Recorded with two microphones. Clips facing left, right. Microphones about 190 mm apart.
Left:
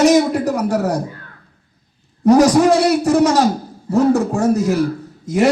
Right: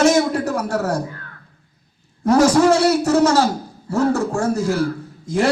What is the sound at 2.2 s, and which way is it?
A man's voice, 15° left (ahead or behind).